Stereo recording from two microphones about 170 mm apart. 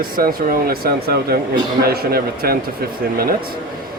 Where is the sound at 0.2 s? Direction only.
60° right (ahead or behind).